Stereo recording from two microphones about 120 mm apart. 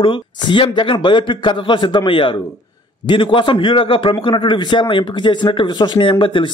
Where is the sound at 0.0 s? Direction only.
45° left (ahead or behind).